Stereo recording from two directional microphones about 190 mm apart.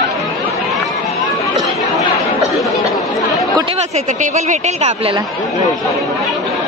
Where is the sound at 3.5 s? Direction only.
30° right (ahead or behind).